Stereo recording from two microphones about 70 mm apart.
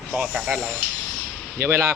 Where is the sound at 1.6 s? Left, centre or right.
Right.